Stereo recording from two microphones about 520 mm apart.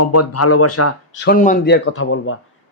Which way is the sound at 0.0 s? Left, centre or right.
Left.